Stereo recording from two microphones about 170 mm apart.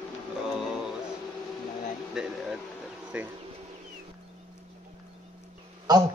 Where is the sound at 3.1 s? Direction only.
5° right (ahead or behind).